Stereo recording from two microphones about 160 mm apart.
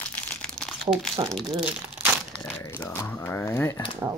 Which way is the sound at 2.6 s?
15° left (ahead or behind).